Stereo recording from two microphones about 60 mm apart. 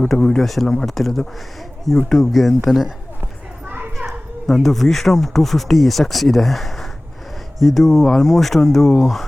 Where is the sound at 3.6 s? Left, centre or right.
Right.